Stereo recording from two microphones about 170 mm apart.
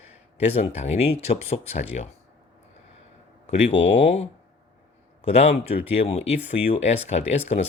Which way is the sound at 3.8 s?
45° left (ahead or behind).